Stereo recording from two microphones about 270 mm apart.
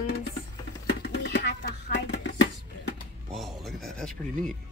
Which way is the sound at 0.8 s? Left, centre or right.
Left.